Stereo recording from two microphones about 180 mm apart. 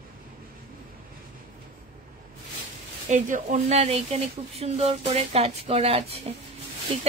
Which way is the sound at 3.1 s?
40° right (ahead or behind).